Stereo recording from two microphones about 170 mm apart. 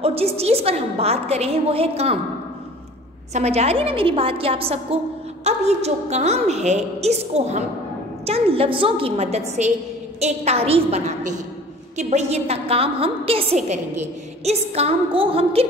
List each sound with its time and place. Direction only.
0.0 s a woman's voice: 35° right (ahead or behind)
3.3 s a woman's voice: 40° right (ahead or behind)